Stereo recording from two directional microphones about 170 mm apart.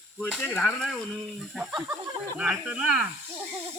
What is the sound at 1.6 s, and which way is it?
Speech, 10° right (ahead or behind).